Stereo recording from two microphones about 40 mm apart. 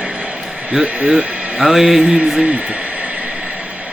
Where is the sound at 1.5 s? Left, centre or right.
Centre.